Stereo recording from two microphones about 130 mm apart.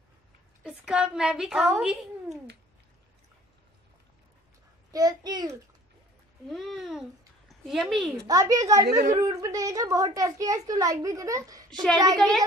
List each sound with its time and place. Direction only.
0.7 s a woman's voice: 5° right (ahead or behind)
4.9 s a child's voice: 30° right (ahead or behind)
6.5 s a child's voice: centre (ahead or behind)
8.3 s a woman's voice: 30° right (ahead or behind)
12.2 s speech: 5° left (ahead or behind)